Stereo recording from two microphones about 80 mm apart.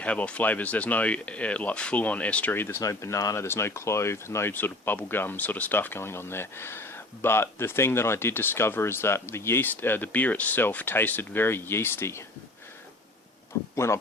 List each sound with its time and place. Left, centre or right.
0.0 s speech: centre
2.8 s speech: left
3.4 s speech: left
4.5 s speech: left
13.7 s speech: left